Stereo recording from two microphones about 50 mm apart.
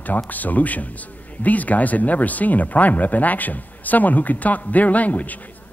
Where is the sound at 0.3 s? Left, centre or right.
Left.